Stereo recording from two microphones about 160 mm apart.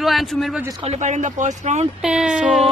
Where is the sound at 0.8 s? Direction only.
45° right (ahead or behind).